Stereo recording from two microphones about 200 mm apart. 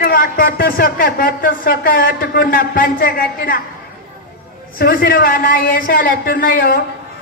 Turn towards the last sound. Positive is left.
turn(degrees=45)  # may be behind; listen again after turning